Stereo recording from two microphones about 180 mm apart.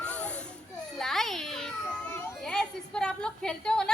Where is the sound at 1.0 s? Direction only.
Centre (ahead or behind).